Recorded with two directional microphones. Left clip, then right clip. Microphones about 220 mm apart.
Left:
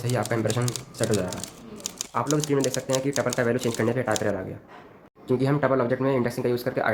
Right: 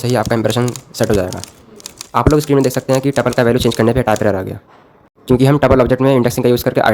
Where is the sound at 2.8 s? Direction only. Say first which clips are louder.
Right 11 dB; 55° right (ahead or behind).